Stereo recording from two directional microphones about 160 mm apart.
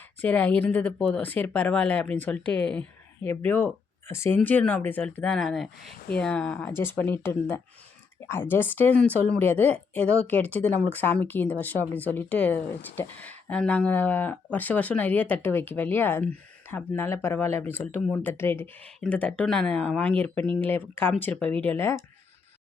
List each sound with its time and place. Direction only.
0.2 s speech: 10° left (ahead or behind)